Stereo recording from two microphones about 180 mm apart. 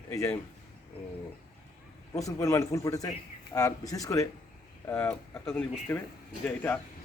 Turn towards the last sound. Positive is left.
turn(degrees=10)  # may be behind; listen again after turning